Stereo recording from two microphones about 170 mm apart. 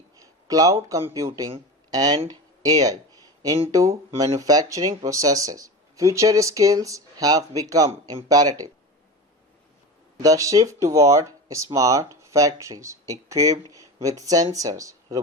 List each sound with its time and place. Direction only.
0.2 s speech: 20° right (ahead or behind)
1.9 s a sound: 20° right (ahead or behind)
3.7 s speech: 20° right (ahead or behind)
10.2 s speech: 20° right (ahead or behind)